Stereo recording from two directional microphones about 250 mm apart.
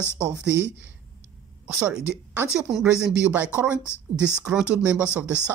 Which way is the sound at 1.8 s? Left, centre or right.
Centre.